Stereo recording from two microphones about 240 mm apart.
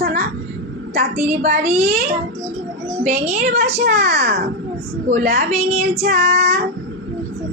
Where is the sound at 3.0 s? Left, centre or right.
Right.